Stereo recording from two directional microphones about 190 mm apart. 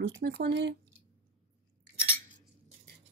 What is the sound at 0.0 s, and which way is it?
Speech, 70° right (ahead or behind).